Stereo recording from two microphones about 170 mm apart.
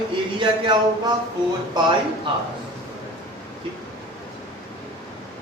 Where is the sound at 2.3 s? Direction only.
30° right (ahead or behind).